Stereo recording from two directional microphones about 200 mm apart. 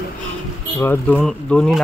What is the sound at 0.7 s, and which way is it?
Speech, 10° left (ahead or behind).